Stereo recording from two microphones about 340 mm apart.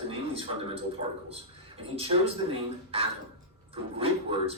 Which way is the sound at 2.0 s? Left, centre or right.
Centre.